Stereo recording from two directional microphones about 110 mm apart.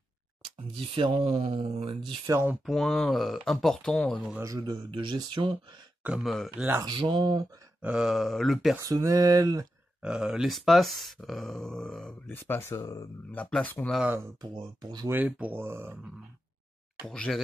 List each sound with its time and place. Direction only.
0.7 s speech: 55° right (ahead or behind)
2.6 s speech: centre (ahead or behind)
4.4 s speech: 35° right (ahead or behind)
6.2 s speech: centre (ahead or behind)
6.5 s speech: 15° right (ahead or behind)
6.9 s speech: 45° right (ahead or behind)
7.8 s speech: 5° right (ahead or behind)
8.8 s speech: 30° right (ahead or behind)
10.0 s speech: 5° right (ahead or behind)
12.3 s speech: 20° left (ahead or behind)
13.5 s speech: 10° left (ahead or behind)
14.4 s speech: 40° right (ahead or behind)
15.0 s speech: 15° right (ahead or behind)
17.0 s speech: 5° left (ahead or behind)